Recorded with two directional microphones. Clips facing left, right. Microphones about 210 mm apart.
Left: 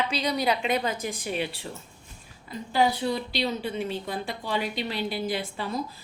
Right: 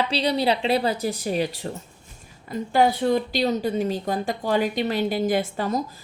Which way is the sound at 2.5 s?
50° right (ahead or behind).